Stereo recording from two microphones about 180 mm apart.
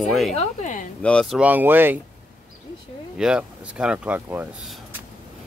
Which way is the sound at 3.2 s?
5° right (ahead or behind).